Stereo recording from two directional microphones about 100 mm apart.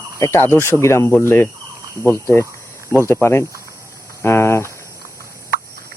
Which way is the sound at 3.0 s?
25° left (ahead or behind).